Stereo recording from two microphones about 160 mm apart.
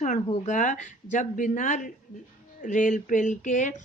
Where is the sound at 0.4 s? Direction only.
55° left (ahead or behind).